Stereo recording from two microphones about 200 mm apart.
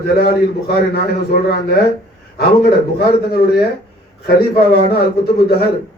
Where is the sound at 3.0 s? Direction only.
50° left (ahead or behind).